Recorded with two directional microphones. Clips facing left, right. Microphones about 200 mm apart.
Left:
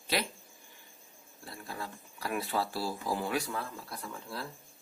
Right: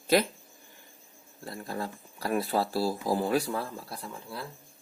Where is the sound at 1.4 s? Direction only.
40° right (ahead or behind).